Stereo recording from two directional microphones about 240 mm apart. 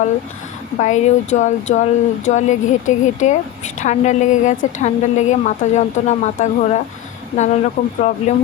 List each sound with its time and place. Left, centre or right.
0.8 s a woman's voice: left